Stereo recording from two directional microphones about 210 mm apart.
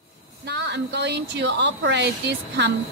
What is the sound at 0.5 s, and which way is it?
Speech, 55° right (ahead or behind).